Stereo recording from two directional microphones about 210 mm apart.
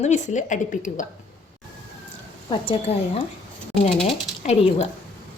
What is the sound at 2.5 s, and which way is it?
Speech, 25° left (ahead or behind).